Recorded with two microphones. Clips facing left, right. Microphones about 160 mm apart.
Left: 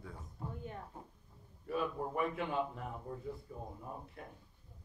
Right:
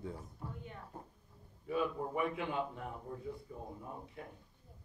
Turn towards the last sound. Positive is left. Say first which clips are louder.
# even
turn(degrees=0)  # may be behind; listen again after turning